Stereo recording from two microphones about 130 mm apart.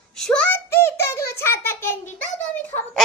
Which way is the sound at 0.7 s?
20° left (ahead or behind).